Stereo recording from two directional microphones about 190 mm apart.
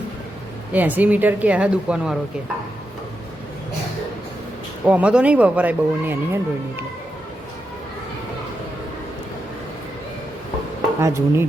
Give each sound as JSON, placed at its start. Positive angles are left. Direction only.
{"t": 0.7, "sound": "speech", "side_deg": -10}
{"t": 4.9, "sound": "speech", "side_deg": -5}
{"t": 11.0, "sound": "speech", "side_deg": -15}